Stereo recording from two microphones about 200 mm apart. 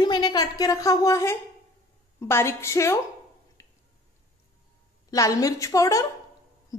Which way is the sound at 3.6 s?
15° left (ahead or behind).